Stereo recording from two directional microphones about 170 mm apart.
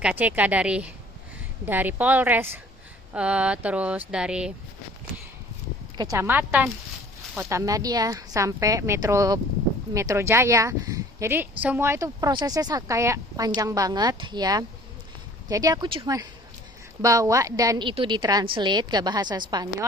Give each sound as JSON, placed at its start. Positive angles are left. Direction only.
{"t": 0.0, "sound": "speech", "side_deg": -10}
{"t": 6.0, "sound": "speech", "side_deg": -15}